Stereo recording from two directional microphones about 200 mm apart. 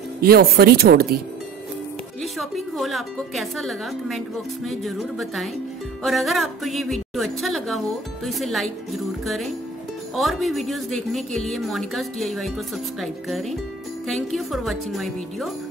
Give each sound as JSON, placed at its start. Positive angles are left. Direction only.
{"t": 0.2, "sound": "speech", "side_deg": -50}
{"t": 2.3, "sound": "a woman's voice", "side_deg": 0}